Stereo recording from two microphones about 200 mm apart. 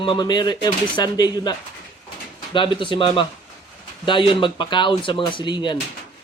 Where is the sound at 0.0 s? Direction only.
20° left (ahead or behind).